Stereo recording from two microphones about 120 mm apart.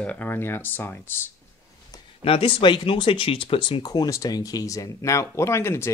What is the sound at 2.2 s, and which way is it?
Speech, 50° left (ahead or behind).